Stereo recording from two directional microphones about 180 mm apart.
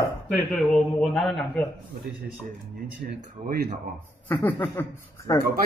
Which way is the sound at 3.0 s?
60° right (ahead or behind).